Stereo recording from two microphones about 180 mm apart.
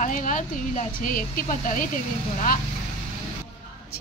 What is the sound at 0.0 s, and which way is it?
Speech, 45° left (ahead or behind).